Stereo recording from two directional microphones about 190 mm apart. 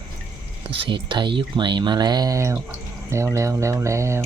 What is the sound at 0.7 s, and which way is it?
Speech, 25° right (ahead or behind).